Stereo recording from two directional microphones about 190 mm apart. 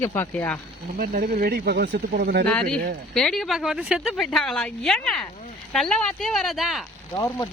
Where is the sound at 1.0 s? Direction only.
45° right (ahead or behind).